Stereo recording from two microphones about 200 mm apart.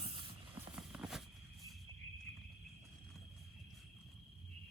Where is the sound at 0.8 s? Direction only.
5° right (ahead or behind).